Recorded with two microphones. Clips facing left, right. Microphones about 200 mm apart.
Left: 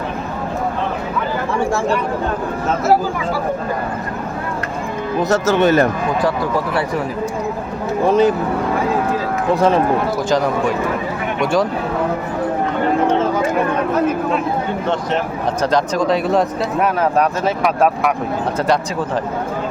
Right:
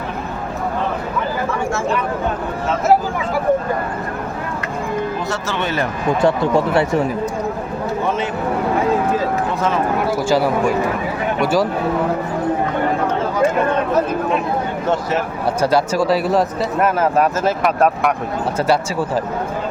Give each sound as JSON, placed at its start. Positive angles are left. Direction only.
{"t": 5.3, "sound": "speech", "side_deg": 45}
{"t": 6.2, "sound": "speech", "side_deg": -25}
{"t": 8.0, "sound": "speech", "side_deg": 35}
{"t": 9.6, "sound": "speech", "side_deg": 35}
{"t": 10.2, "sound": "speech", "side_deg": -5}
{"t": 15.6, "sound": "speech", "side_deg": -10}